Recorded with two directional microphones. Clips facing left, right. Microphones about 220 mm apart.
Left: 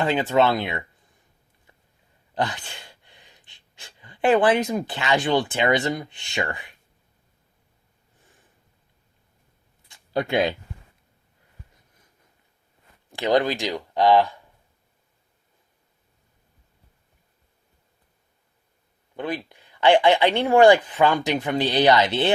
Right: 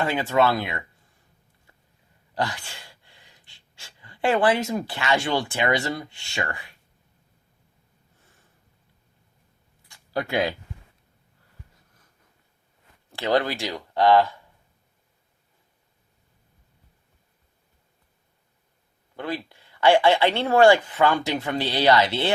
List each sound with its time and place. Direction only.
0.0 s speech: 20° left (ahead or behind)
2.3 s speech: 20° left (ahead or behind)
9.9 s speech: 20° left (ahead or behind)
13.1 s speech: 15° left (ahead or behind)
19.1 s speech: 20° left (ahead or behind)